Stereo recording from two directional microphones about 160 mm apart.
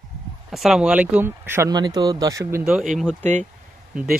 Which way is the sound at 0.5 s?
Centre (ahead or behind).